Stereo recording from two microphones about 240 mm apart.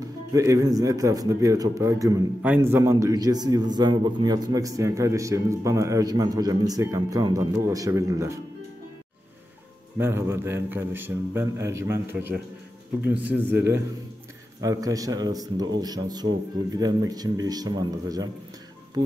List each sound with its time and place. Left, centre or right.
0.0 s a man's voice: centre
9.9 s a man's voice: centre